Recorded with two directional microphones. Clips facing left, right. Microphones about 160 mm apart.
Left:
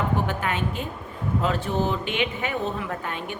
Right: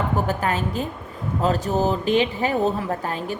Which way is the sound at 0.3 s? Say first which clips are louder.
Right 3 dB; 35° right (ahead or behind).